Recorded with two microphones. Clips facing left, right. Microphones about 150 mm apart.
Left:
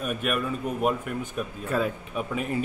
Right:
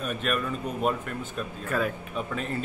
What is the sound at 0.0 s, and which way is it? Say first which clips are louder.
Speech: left 1 dB; 10° left (ahead or behind).